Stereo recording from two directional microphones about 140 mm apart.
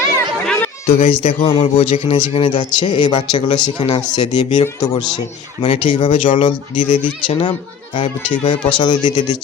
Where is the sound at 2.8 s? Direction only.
30° left (ahead or behind).